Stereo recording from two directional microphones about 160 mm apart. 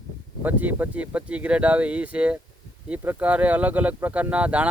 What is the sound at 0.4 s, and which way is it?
Speech, 10° right (ahead or behind).